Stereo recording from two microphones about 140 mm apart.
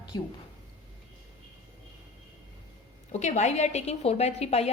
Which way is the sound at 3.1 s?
55° left (ahead or behind).